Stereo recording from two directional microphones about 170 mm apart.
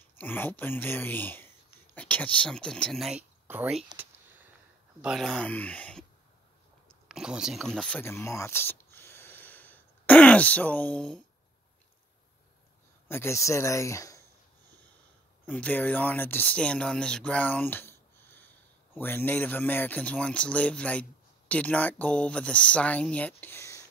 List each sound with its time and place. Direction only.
0.2 s speech: 10° left (ahead or behind)
7.1 s speech: 5° right (ahead or behind)
13.1 s speech: 15° left (ahead or behind)
15.4 s speech: 10° left (ahead or behind)